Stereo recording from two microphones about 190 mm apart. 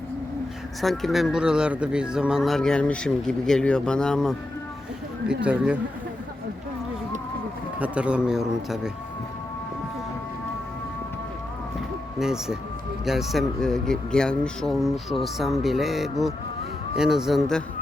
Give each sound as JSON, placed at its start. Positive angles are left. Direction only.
{"t": 0.8, "sound": "speech", "side_deg": 0}
{"t": 7.8, "sound": "speech", "side_deg": -5}
{"t": 12.2, "sound": "speech", "side_deg": -5}